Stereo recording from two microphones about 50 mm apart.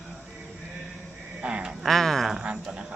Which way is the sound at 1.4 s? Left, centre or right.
Right.